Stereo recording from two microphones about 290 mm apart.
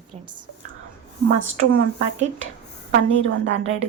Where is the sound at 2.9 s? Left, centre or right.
Right.